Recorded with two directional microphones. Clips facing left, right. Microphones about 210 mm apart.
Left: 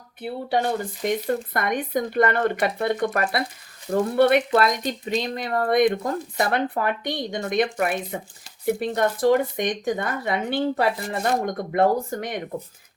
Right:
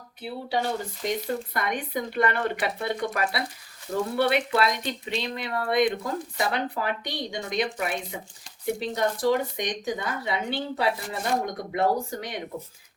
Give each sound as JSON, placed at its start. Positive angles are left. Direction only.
{"t": 1.0, "sound": "speech", "side_deg": 50}